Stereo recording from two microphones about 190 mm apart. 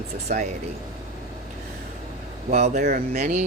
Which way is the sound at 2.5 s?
35° right (ahead or behind).